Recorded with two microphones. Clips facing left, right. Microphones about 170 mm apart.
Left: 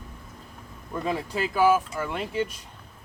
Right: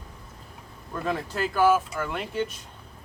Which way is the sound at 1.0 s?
5° left (ahead or behind).